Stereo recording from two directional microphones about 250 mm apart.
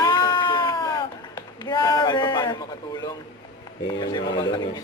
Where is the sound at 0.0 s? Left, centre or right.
Centre.